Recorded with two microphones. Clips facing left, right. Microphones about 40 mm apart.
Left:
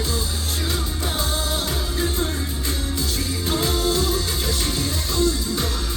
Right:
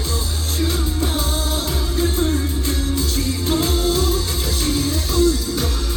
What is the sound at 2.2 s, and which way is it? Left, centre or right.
Music, centre.